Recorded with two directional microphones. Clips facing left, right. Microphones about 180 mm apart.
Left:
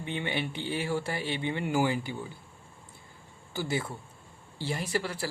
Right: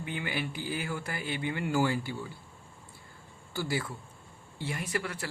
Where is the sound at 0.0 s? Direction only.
25° left (ahead or behind).